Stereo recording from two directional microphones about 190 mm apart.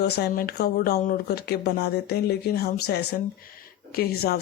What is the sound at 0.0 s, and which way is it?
Speech, 55° left (ahead or behind).